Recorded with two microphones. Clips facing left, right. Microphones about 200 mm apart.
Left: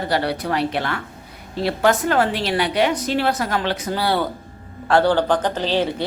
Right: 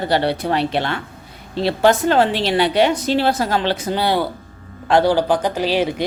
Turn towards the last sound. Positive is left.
turn(degrees=-10)  # may be behind; listen again after turning